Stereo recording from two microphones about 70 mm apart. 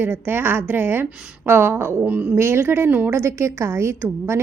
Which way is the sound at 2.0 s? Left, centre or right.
Right.